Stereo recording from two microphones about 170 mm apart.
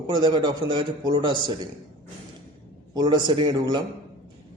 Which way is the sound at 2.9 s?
25° right (ahead or behind).